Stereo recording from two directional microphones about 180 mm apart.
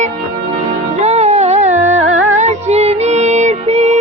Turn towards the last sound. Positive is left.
turn(degrees=-40)  # may be behind; listen again after turning